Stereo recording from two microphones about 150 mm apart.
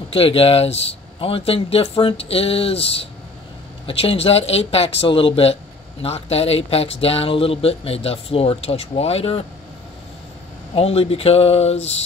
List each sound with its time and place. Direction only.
0.1 s speech: 40° left (ahead or behind)
10.7 s speech: 40° left (ahead or behind)